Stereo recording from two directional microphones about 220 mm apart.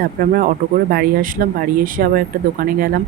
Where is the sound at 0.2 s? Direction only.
40° right (ahead or behind).